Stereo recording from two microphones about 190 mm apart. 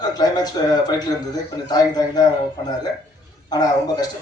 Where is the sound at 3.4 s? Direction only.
20° left (ahead or behind).